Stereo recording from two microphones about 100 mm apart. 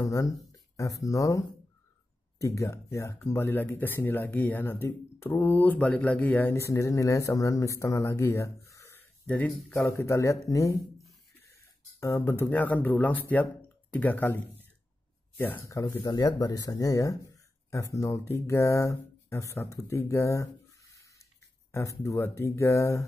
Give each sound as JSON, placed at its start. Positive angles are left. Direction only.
{"t": 0.0, "sound": "speech", "side_deg": 35}
{"t": 2.4, "sound": "speech", "side_deg": 30}
{"t": 9.9, "sound": "speech", "side_deg": 30}
{"t": 12.0, "sound": "speech", "side_deg": 25}
{"t": 15.7, "sound": "speech", "side_deg": 30}
{"t": 20.9, "sound": "a sound", "side_deg": 30}
{"t": 22.0, "sound": "speech", "side_deg": 30}